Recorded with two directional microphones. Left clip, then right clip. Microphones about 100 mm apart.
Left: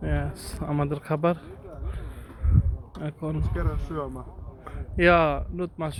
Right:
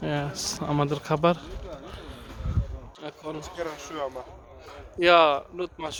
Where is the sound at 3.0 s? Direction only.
35° right (ahead or behind).